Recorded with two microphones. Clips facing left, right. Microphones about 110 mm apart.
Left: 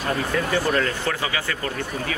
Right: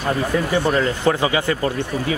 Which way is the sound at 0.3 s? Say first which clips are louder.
Right 3 dB; 15° right (ahead or behind).